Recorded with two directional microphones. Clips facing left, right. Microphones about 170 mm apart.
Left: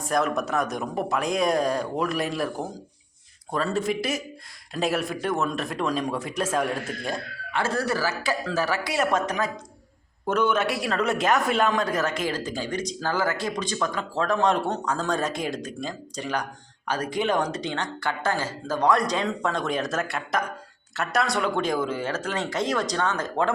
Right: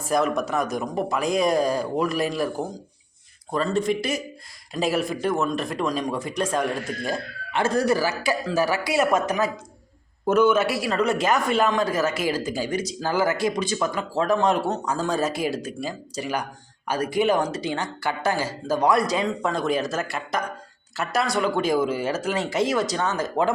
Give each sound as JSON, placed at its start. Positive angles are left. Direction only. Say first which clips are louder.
{"t": 0.0, "sound": "a man's voice", "louder": "right 2 dB", "side_deg": 0}
{"t": 7.5, "sound": "a man's voice", "louder": "right 5 dB", "side_deg": -15}